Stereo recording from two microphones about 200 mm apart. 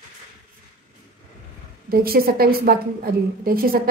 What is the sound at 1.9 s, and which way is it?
A woman's voice, 50° right (ahead or behind).